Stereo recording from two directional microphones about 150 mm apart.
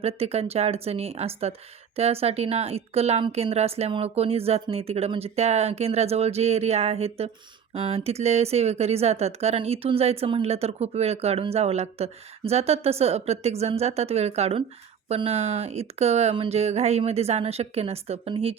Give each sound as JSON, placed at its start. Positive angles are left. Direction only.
{"t": 0.0, "sound": "a woman's voice", "side_deg": -45}